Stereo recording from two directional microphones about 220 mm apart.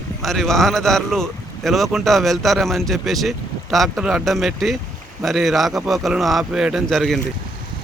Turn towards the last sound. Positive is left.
turn(degrees=0)  # may be behind; listen again after turning